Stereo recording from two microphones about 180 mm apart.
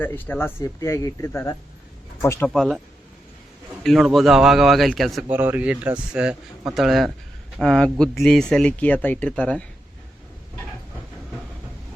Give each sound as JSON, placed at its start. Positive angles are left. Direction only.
{"t": 0.0, "sound": "speech", "side_deg": 10}
{"t": 2.5, "sound": "speech", "side_deg": 0}
{"t": 3.8, "sound": "speech", "side_deg": 0}